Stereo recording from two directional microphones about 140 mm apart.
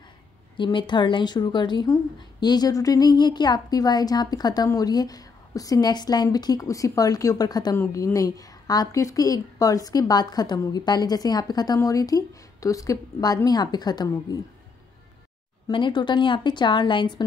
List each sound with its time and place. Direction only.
0.6 s speech: 35° left (ahead or behind)
15.7 s a woman's voice: 35° left (ahead or behind)